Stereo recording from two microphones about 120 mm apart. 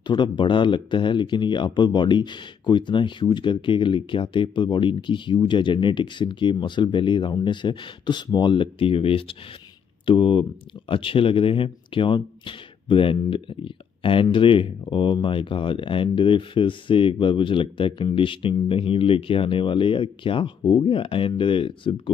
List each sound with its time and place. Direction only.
0.0 s speech: 40° left (ahead or behind)